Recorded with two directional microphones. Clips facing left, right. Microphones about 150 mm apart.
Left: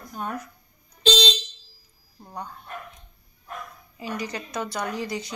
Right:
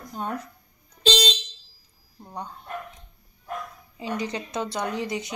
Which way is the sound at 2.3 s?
20° right (ahead or behind).